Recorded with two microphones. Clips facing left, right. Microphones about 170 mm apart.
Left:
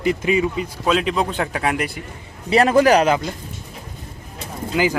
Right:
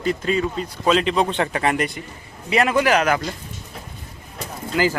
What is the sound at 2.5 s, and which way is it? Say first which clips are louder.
Speech: left 4 dB; 35° left (ahead or behind).